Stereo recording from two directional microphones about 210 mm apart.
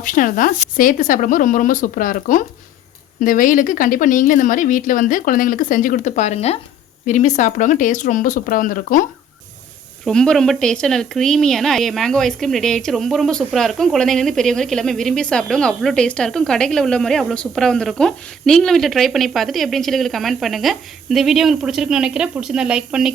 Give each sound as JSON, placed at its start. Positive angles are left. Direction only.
{"t": 0.0, "sound": "a woman's voice", "side_deg": 40}
{"t": 10.1, "sound": "a woman's voice", "side_deg": 5}